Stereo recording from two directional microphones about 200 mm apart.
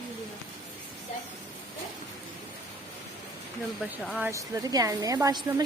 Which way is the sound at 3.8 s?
5° right (ahead or behind).